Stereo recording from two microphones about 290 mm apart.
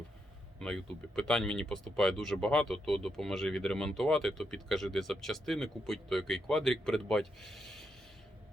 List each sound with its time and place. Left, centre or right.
0.6 s speech: centre